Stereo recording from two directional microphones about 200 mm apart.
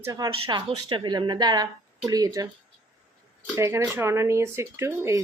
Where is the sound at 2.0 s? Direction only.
20° right (ahead or behind).